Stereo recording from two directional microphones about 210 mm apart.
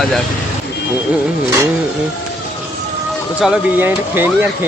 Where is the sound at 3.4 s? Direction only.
5° right (ahead or behind).